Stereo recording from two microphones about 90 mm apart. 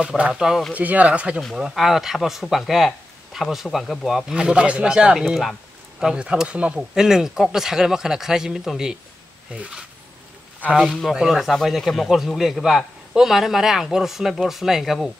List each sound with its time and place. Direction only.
0.3 s speech: 5° right (ahead or behind)
0.7 s speech: 15° right (ahead or behind)
1.6 s speech: 5° right (ahead or behind)
10.9 s speech: centre (ahead or behind)